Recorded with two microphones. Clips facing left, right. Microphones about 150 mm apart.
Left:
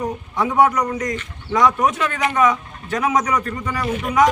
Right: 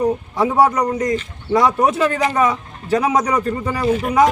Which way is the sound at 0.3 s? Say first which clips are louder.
Even; 35° right (ahead or behind).